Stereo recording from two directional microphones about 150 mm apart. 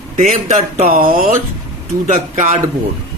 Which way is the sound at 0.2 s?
55° right (ahead or behind).